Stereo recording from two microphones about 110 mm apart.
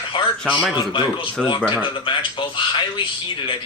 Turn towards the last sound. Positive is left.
turn(degrees=50)  # may be behind; listen again after turning